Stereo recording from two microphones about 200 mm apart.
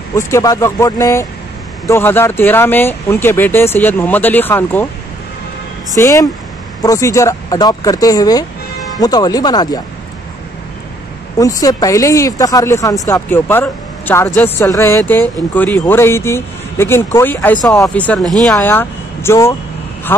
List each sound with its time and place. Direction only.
0.1 s speech: 15° left (ahead or behind)
5.9 s speech: 15° left (ahead or behind)
11.3 s speech: 15° left (ahead or behind)
17.9 s speech: 5° left (ahead or behind)